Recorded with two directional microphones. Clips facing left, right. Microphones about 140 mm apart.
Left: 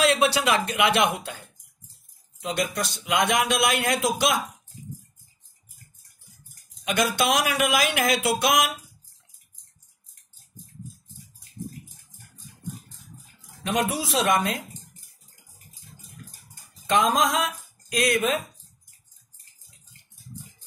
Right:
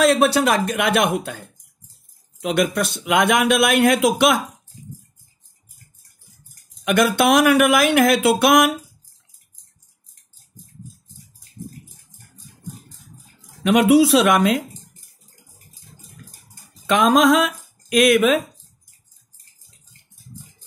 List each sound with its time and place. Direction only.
0.0 s speech: 45° right (ahead or behind)
2.4 s speech: 60° right (ahead or behind)
6.8 s speech: 55° right (ahead or behind)
13.7 s a woman's voice: 70° right (ahead or behind)
16.8 s speech: 65° right (ahead or behind)